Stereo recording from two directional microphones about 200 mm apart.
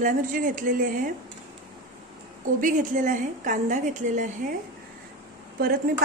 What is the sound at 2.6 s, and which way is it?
A woman's voice, 40° right (ahead or behind).